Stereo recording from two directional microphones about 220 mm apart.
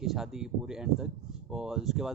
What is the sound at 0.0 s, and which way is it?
Speech, centre (ahead or behind).